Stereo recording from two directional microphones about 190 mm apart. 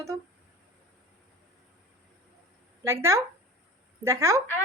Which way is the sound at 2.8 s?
15° right (ahead or behind).